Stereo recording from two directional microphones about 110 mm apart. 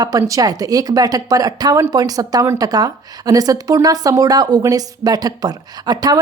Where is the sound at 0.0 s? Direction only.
30° right (ahead or behind).